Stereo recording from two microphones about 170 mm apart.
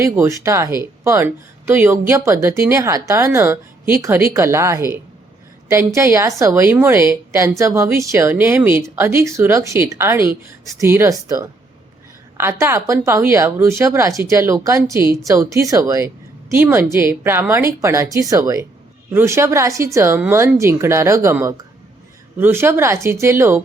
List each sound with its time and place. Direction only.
0.0 s speech: 15° right (ahead or behind)